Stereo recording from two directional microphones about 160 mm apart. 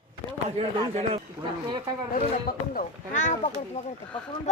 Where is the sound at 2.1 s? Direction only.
55° left (ahead or behind).